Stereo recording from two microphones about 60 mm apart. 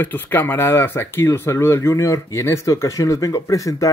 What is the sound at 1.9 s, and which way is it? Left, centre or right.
Speech, left.